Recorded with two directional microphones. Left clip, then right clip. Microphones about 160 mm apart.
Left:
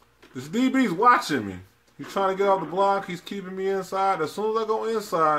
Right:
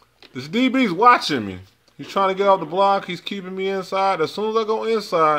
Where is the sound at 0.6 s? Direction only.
15° right (ahead or behind).